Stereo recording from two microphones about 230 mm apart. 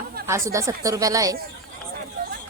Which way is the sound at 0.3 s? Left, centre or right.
Centre.